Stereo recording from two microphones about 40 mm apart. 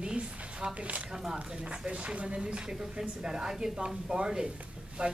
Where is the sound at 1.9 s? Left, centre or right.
Right.